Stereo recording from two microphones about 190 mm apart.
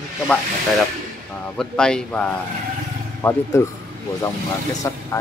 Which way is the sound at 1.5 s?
5° left (ahead or behind).